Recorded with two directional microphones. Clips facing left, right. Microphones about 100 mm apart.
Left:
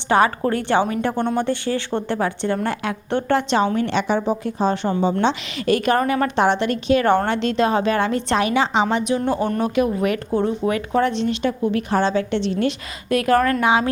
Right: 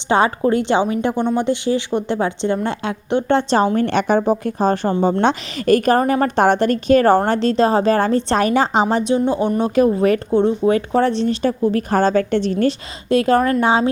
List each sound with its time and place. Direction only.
0.1 s a woman's voice: 25° right (ahead or behind)
3.3 s speech: 40° right (ahead or behind)
3.8 s a woman's voice: 50° right (ahead or behind)
9.1 s a woman's voice: 20° right (ahead or behind)
9.7 s speech: 35° right (ahead or behind)
13.1 s a woman's voice: 25° right (ahead or behind)